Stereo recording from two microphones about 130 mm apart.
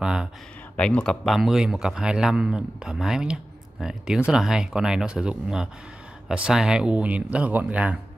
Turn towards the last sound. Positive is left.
turn(degrees=-10)  # may be behind; listen again after turning